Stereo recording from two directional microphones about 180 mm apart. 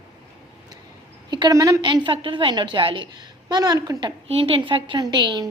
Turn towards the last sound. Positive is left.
turn(degrees=-25)  # may be behind; listen again after turning